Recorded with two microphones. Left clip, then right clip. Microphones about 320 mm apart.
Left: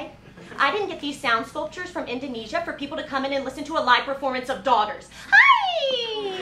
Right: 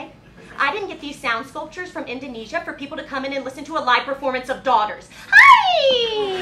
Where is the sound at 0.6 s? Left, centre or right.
Right.